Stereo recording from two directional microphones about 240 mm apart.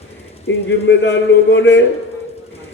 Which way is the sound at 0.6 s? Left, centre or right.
Left.